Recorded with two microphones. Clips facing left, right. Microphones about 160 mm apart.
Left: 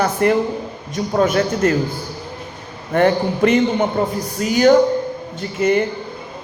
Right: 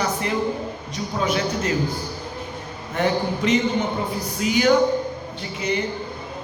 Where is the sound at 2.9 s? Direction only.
55° left (ahead or behind).